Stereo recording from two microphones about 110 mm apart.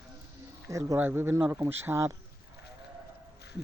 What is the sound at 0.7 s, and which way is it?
Speech, 30° right (ahead or behind).